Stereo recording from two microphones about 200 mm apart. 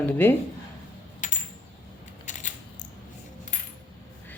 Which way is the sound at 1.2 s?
40° left (ahead or behind).